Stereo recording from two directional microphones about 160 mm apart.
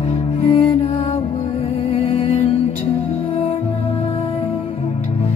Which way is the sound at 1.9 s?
35° left (ahead or behind).